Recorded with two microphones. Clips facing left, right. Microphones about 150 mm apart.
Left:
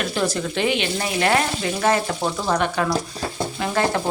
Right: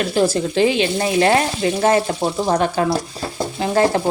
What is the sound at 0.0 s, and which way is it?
Frying, 35° right (ahead or behind).